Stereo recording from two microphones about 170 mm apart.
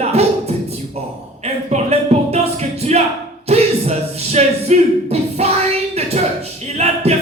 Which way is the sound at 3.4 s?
40° right (ahead or behind).